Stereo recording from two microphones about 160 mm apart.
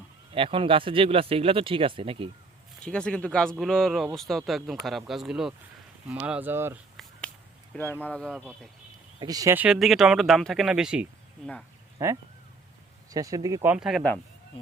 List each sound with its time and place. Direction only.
0.3 s speech: 35° right (ahead or behind)
2.8 s speech: 5° left (ahead or behind); by 6.7 s 15° right (ahead or behind)
7.0 s a sound: centre (ahead or behind)
7.7 s speech: 10° left (ahead or behind)
9.1 s speech: 25° right (ahead or behind)
9.6 s speech: 5° right (ahead or behind)
12.0 s speech: 15° right (ahead or behind)
13.7 s speech: 5° right (ahead or behind)